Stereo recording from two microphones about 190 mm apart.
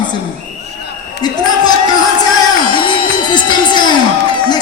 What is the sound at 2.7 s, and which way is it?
Music, 25° left (ahead or behind).